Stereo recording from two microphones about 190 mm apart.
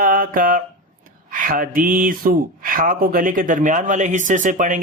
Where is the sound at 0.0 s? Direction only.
45° right (ahead or behind).